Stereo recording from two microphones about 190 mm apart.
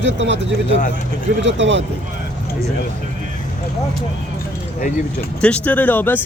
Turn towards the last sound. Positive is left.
turn(degrees=10)  # may be behind; listen again after turning